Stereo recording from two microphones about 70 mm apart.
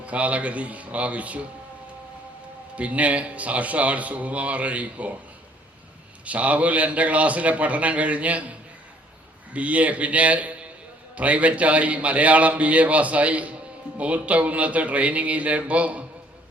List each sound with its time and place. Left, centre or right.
0.0 s a man's voice: centre
2.7 s a man's voice: centre
6.2 s a man's voice: centre